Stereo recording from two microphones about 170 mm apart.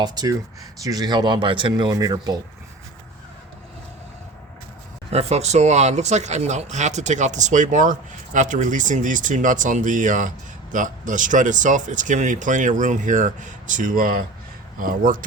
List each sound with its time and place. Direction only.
0.0 s speech: 25° right (ahead or behind)
5.1 s speech: 40° right (ahead or behind)